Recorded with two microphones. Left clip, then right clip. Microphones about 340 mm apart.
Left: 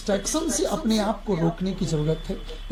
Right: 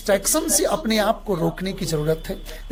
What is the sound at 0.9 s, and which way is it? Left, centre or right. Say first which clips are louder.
Speech: right 5 dB; right.